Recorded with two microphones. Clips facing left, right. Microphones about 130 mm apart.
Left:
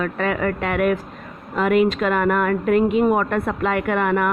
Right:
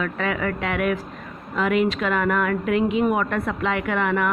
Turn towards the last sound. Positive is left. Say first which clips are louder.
# left 3 dB
turn(degrees=45)  # may be behind; listen again after turning